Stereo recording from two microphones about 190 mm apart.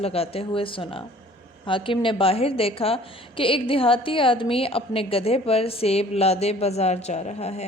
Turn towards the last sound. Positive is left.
turn(degrees=35)  # may be behind; listen again after turning